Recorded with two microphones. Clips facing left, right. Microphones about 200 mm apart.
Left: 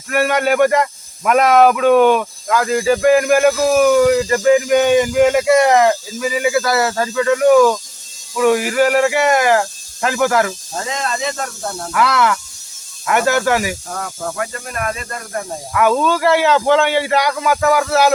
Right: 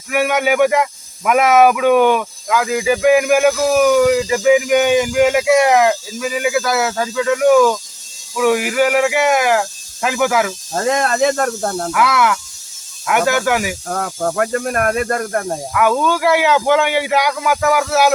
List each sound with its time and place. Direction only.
0.1 s speech: 5° right (ahead or behind)
10.8 s speech: 55° right (ahead or behind)
11.9 s speech: centre (ahead or behind)
13.8 s speech: 50° right (ahead or behind)
15.7 s speech: centre (ahead or behind)